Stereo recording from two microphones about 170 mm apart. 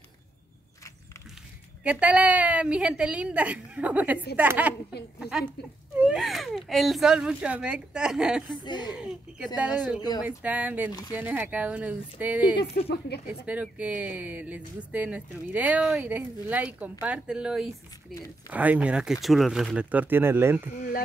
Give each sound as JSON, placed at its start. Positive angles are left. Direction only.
{"t": 1.8, "sound": "a woman's voice", "side_deg": -5}
{"t": 5.9, "sound": "speech", "side_deg": -5}
{"t": 8.5, "sound": "speech", "side_deg": 25}
{"t": 8.9, "sound": "a woman's voice", "side_deg": -5}
{"t": 12.8, "sound": "speech", "side_deg": 70}
{"t": 13.3, "sound": "a woman's voice", "side_deg": -10}